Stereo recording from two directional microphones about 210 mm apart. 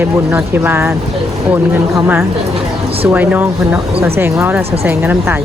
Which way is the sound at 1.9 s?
10° right (ahead or behind).